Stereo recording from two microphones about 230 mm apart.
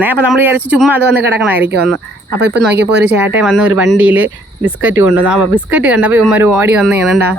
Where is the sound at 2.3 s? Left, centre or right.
Right.